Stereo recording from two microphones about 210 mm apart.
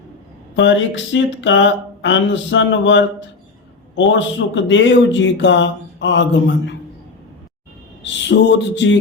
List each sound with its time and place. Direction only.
0.5 s speech: 60° left (ahead or behind)
4.1 s speech: 60° left (ahead or behind)
8.0 s speech: 60° left (ahead or behind)